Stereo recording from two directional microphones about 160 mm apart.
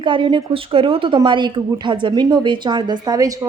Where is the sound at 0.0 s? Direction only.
30° right (ahead or behind).